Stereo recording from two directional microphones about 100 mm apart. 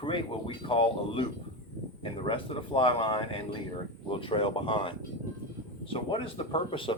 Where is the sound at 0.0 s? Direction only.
60° left (ahead or behind).